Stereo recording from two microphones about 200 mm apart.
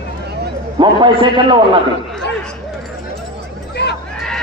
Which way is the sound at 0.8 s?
25° right (ahead or behind).